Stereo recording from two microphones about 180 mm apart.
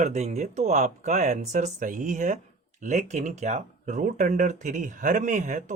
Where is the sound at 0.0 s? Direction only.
35° right (ahead or behind).